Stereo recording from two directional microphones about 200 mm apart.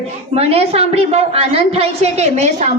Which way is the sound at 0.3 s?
30° right (ahead or behind).